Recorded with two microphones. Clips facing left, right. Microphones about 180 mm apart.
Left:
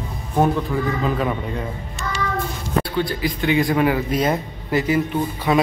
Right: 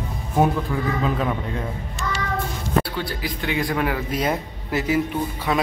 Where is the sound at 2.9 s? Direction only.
5° right (ahead or behind).